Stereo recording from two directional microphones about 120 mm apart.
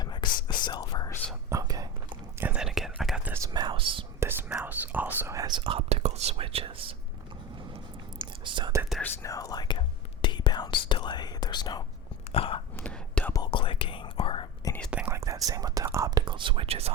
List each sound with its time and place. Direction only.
0.0 s whispering: 40° left (ahead or behind)
1.5 s whispering: 30° right (ahead or behind)
2.4 s whispering: 10° right (ahead or behind)
3.2 s whispering: 20° right (ahead or behind)
3.5 s whispering: 40° right (ahead or behind)
4.2 s whispering: 15° right (ahead or behind)
5.5 s whispering: 50° right (ahead or behind)
8.4 s whispering: 40° right (ahead or behind)
9.2 s whispering: 30° left (ahead or behind)
12.3 s biting: 50° left (ahead or behind)
12.8 s whispering: 10° left (ahead or behind)
13.3 s whispering: 40° left (ahead or behind)
14.6 s whispering: 30° left (ahead or behind)
15.0 s whispering: 25° right (ahead or behind); by 16.9 s 55° right (ahead or behind)